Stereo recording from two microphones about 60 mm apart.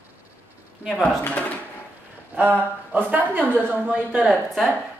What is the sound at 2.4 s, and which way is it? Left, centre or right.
A woman's voice, right.